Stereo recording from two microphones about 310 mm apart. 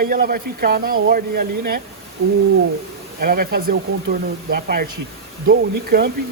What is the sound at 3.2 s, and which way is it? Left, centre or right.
Speech, right.